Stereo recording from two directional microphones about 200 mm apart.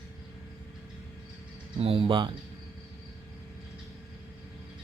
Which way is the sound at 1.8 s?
30° right (ahead or behind).